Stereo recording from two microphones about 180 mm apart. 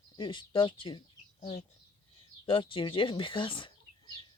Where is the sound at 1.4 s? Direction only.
40° left (ahead or behind).